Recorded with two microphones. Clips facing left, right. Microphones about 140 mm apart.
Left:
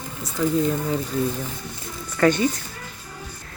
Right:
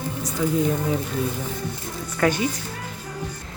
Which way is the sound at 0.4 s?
5° right (ahead or behind).